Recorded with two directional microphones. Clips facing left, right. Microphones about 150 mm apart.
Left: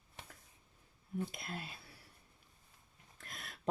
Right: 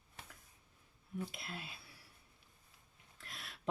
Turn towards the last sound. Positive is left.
turn(degrees=45)  # may be behind; listen again after turning